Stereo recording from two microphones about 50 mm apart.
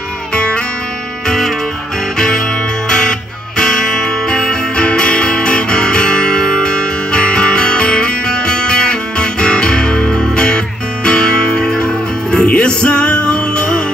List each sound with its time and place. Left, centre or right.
0.3 s music: centre
2.1 s music: centre